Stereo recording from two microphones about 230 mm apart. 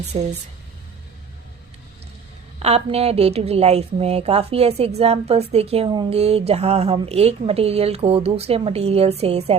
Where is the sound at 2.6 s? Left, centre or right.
Right.